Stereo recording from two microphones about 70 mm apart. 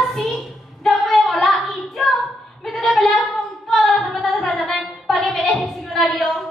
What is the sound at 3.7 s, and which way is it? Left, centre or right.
Child singing, centre.